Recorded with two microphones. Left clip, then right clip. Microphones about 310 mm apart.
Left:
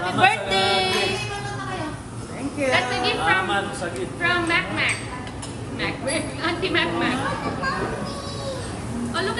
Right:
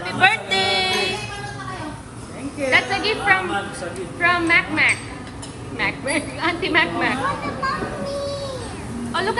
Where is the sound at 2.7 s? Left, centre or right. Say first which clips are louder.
Right 4 dB; centre.